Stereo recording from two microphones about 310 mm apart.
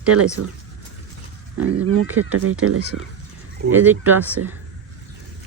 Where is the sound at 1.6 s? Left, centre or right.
Right.